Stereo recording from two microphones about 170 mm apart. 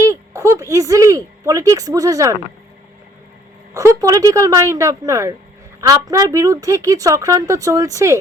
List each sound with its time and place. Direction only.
0.0 s speech: 20° right (ahead or behind)
3.8 s speech: 20° right (ahead or behind)